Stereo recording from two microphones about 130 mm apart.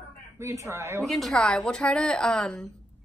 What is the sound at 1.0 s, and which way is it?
Speech, centre (ahead or behind).